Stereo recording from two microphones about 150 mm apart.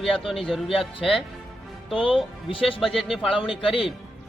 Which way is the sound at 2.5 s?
35° left (ahead or behind).